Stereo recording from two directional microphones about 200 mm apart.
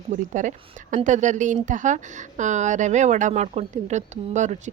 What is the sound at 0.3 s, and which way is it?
Speech, 40° right (ahead or behind).